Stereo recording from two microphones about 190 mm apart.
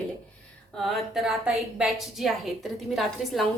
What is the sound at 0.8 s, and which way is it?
A woman's voice, centre (ahead or behind).